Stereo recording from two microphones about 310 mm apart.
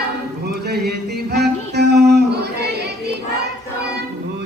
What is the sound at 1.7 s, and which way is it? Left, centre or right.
Music, right.